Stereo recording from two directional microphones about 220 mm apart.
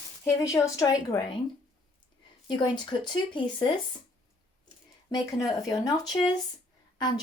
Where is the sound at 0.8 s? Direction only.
15° left (ahead or behind).